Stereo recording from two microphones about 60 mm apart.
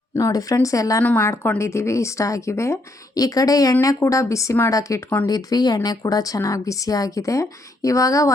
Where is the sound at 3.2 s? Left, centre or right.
Left.